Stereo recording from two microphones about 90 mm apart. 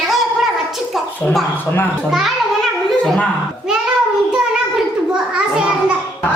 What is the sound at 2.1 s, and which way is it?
Speech, centre (ahead or behind).